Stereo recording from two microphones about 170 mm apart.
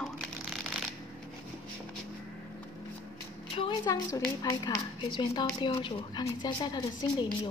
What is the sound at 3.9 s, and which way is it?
A woman's voice, 20° left (ahead or behind).